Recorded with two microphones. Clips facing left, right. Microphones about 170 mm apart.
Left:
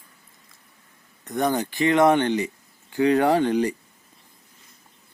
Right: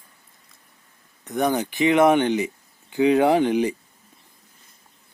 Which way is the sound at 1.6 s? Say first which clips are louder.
Right 1 dB; 15° right (ahead or behind).